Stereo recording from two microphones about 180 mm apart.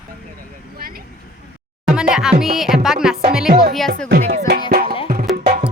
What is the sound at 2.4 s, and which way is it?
Speech, centre (ahead or behind).